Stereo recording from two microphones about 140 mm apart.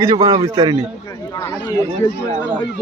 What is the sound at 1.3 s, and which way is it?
Speech, 25° left (ahead or behind).